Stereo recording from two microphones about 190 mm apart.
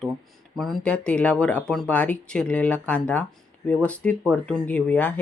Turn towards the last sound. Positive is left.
turn(degrees=10)  # may be behind; listen again after turning